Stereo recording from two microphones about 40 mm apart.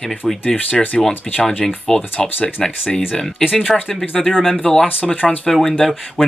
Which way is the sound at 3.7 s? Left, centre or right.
Centre.